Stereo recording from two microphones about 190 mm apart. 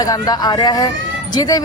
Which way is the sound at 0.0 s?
20° left (ahead or behind).